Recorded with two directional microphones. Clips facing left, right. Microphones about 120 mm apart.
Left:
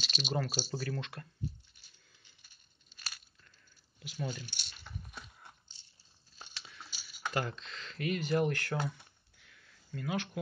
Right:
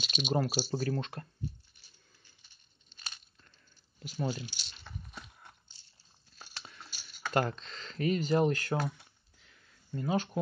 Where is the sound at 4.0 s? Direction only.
40° right (ahead or behind).